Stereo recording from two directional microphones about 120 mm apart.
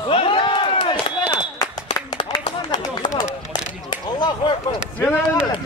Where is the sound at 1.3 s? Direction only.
40° left (ahead or behind).